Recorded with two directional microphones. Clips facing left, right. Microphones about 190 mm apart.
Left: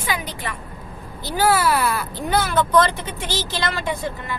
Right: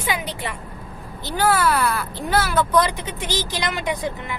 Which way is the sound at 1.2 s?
5° left (ahead or behind).